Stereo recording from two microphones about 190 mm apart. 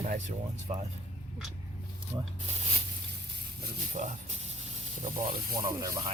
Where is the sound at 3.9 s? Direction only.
40° right (ahead or behind).